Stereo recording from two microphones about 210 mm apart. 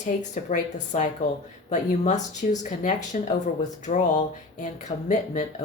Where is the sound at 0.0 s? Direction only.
35° left (ahead or behind).